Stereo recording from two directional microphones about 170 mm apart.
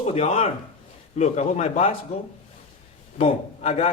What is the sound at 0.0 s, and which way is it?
Speech, 35° left (ahead or behind).